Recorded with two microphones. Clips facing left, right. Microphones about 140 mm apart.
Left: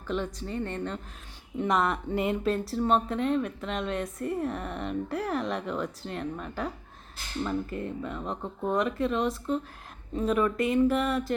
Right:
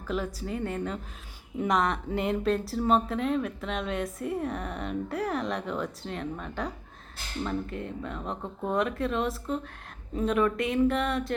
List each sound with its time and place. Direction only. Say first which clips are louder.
0.3 s a woman's voice: right 1 dB; 5° right (ahead or behind)